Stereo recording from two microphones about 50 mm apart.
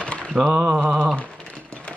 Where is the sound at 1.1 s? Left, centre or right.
Left.